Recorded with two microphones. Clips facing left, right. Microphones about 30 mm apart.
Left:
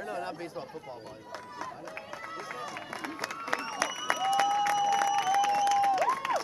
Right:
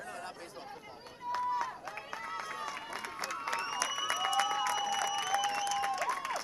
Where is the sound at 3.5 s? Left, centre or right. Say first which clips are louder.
Left 4 dB; centre.